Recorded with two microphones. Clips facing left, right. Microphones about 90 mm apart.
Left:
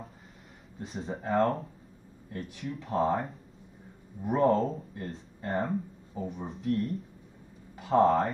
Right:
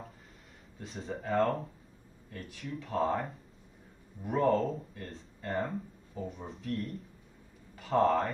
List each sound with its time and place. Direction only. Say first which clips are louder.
0.7 s speech: left 3 dB; 35° left (ahead or behind)
7.7 s a sound: left 4 dB; 20° left (ahead or behind)
8.0 s speech: left 3 dB; 40° left (ahead or behind)